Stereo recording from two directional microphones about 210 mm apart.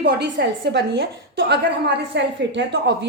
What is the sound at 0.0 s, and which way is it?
A woman's voice, 55° right (ahead or behind).